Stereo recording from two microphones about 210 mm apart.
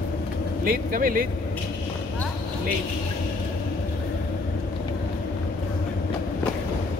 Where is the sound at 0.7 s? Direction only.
45° right (ahead or behind).